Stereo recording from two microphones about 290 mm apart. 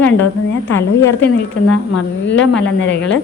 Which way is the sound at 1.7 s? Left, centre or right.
Left.